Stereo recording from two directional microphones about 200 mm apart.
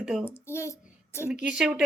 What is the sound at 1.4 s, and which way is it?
Speech, 5° right (ahead or behind).